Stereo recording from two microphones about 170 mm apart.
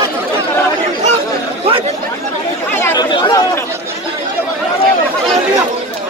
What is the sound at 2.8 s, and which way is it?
Chatter, 15° left (ahead or behind).